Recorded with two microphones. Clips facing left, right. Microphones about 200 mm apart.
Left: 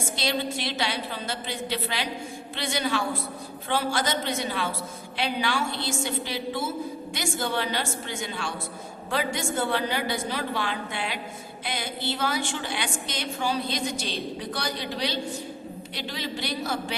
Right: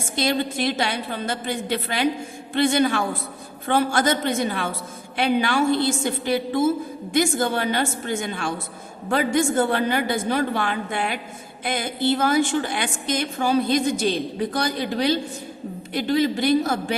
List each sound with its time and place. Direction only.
0.2 s a woman's voice: 50° right (ahead or behind)